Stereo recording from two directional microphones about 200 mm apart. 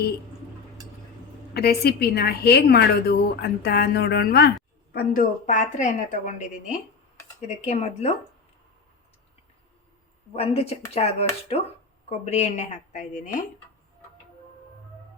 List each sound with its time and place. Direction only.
1.5 s a woman's voice: 50° left (ahead or behind); by 8.1 s 35° left (ahead or behind)
10.3 s speech: 30° left (ahead or behind)